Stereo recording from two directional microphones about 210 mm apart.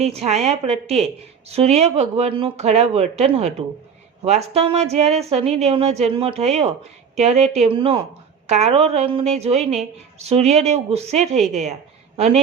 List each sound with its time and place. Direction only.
0.0 s a woman's voice: 30° right (ahead or behind)